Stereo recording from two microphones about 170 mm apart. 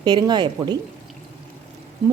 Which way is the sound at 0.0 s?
25° right (ahead or behind).